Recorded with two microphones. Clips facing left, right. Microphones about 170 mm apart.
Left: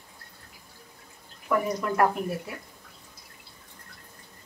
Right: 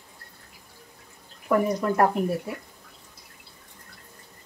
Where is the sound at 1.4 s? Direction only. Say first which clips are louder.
Right 4 dB; 35° right (ahead or behind).